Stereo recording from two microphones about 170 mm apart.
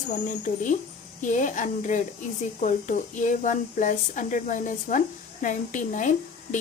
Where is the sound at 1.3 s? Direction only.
45° left (ahead or behind).